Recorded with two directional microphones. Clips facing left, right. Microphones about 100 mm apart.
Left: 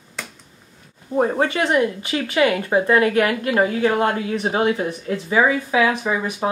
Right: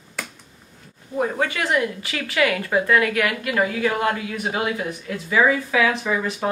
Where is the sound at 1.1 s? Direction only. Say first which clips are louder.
Left 4 dB; 35° left (ahead or behind).